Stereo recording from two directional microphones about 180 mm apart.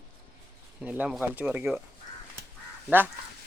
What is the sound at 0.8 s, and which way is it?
Speech, 10° right (ahead or behind).